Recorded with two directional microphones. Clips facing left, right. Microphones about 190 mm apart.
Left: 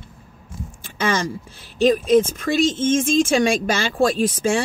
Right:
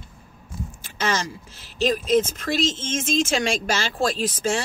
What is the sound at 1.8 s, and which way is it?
Speech, 55° left (ahead or behind).